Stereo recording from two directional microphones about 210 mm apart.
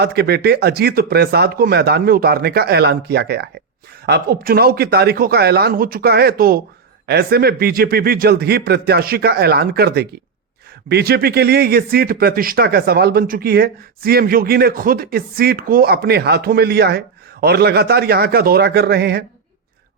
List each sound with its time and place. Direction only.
0.0 s speech: 50° right (ahead or behind)